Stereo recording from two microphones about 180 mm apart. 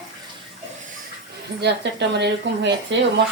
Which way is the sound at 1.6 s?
70° right (ahead or behind).